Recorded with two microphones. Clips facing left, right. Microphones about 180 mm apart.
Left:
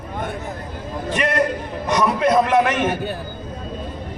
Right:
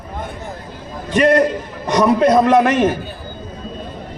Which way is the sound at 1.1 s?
35° right (ahead or behind).